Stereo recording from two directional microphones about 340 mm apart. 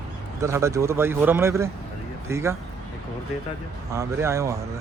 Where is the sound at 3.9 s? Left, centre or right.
Centre.